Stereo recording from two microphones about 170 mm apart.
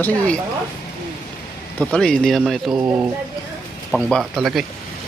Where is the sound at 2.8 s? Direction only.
15° right (ahead or behind).